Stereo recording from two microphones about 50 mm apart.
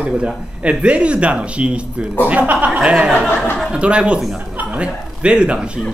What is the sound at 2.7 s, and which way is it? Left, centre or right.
A man's voice, centre.